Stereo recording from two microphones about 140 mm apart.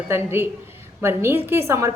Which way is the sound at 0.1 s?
15° right (ahead or behind).